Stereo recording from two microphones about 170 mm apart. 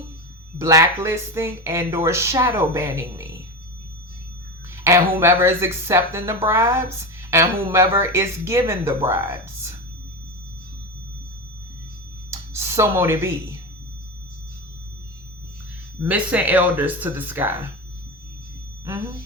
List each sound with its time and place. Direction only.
0.6 s speech: 15° right (ahead or behind)
4.8 s speech: 15° right (ahead or behind)
12.3 s a sound: 15° right (ahead or behind)
16.0 s speech: 10° right (ahead or behind)